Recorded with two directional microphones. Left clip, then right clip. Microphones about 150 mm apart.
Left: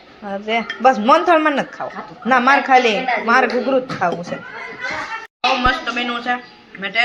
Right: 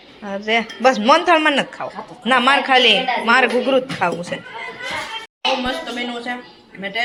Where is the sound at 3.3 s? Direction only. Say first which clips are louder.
Right 1 dB; 10° right (ahead or behind).